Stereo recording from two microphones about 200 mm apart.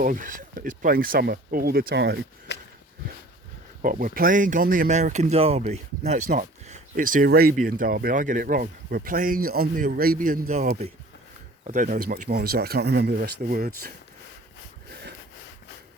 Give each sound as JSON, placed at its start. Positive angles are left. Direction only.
{"t": 0.0, "sound": "speech", "side_deg": -40}
{"t": 2.5, "sound": "a sound", "side_deg": 60}
{"t": 3.8, "sound": "speech", "side_deg": -40}